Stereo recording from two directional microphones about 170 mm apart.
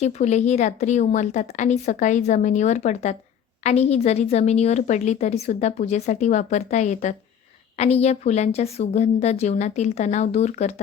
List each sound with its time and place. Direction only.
0.0 s a woman's voice: 45° left (ahead or behind)